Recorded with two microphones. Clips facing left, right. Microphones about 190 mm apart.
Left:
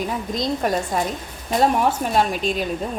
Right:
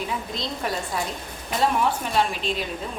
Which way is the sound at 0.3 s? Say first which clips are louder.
Left 10 dB; 45° left (ahead or behind).